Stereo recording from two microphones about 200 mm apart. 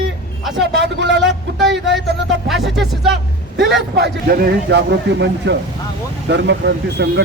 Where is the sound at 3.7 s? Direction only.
55° right (ahead or behind).